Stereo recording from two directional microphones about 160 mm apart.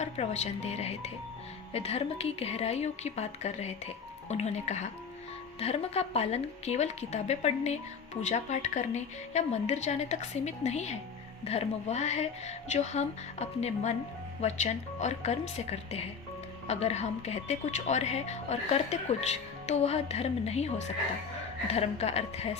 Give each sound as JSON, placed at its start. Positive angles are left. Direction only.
{"t": 0.0, "sound": "speech", "side_deg": 40}